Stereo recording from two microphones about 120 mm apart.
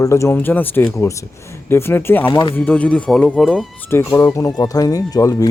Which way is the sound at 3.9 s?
20° left (ahead or behind).